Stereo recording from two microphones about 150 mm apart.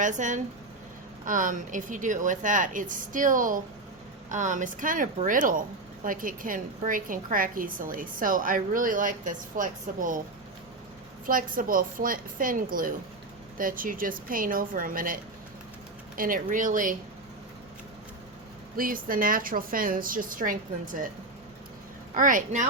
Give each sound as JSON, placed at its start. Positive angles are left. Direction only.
{"t": 0.0, "sound": "speech", "side_deg": -55}
{"t": 11.3, "sound": "a woman's voice", "side_deg": -65}
{"t": 18.8, "sound": "a woman's voice", "side_deg": -70}
{"t": 22.1, "sound": "speech", "side_deg": -60}